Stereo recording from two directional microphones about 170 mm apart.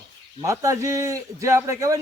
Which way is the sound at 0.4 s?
20° right (ahead or behind).